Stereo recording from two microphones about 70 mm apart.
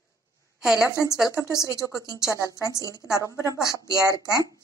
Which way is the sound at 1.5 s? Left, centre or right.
Left.